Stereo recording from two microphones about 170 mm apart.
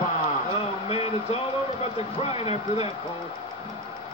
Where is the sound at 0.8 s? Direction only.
35° left (ahead or behind).